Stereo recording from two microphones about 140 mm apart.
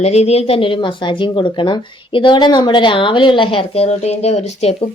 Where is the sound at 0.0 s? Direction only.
50° left (ahead or behind).